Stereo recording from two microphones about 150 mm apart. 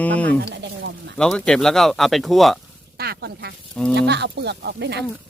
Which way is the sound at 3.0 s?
90° right.